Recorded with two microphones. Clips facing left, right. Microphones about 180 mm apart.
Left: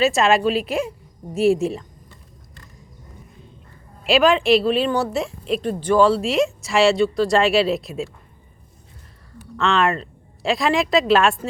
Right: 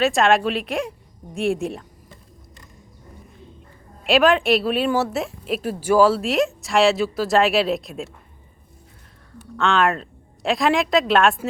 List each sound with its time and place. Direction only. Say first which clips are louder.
0.0 s a woman's voice: left 1 dB; centre (ahead or behind)
4.0 s a woman's voice: even; centre (ahead or behind)
9.6 s a woman's voice: even; centre (ahead or behind)